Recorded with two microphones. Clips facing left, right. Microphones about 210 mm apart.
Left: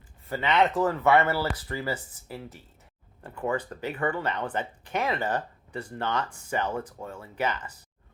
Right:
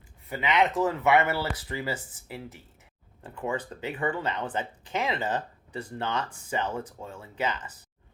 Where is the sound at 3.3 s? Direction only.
20° right (ahead or behind).